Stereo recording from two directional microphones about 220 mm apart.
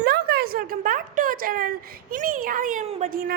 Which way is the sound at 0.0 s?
45° right (ahead or behind).